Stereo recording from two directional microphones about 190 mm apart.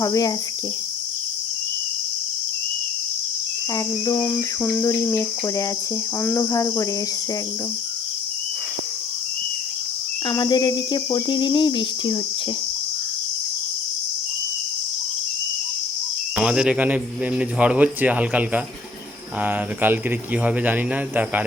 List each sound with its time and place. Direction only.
0.0 s cricket: 20° left (ahead or behind)
3.8 s cricket: 15° left (ahead or behind)
10.2 s cricket: 20° left (ahead or behind)
16.3 s speech: 5° right (ahead or behind)